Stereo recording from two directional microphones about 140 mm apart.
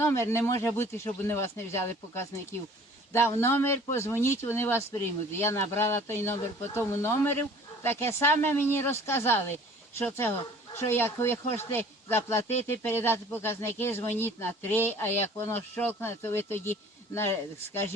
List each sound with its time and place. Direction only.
0.0 s speech: 20° left (ahead or behind)